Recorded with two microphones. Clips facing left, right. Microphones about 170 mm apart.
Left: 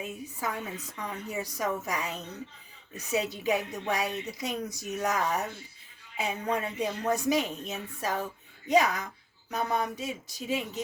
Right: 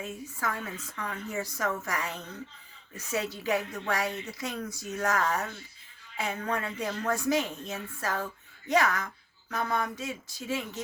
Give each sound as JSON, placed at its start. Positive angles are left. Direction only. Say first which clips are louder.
{"t": 0.0, "sound": "speech", "louder": "even", "side_deg": 15}